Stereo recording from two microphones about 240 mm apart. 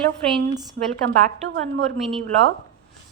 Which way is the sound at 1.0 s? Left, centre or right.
Right.